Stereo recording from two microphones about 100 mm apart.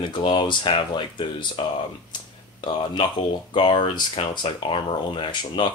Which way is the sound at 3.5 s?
55° left (ahead or behind).